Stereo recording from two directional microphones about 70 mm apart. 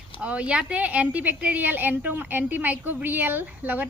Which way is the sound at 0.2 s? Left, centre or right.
Centre.